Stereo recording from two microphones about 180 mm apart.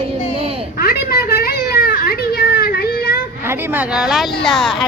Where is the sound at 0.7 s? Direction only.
55° left (ahead or behind).